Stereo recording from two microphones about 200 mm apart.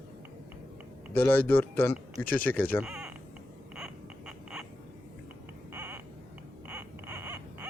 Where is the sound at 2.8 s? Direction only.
5° right (ahead or behind).